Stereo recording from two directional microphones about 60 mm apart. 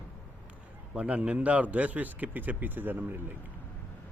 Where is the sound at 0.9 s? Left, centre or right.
Right.